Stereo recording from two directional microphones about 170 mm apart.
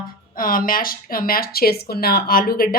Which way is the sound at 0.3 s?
55° left (ahead or behind).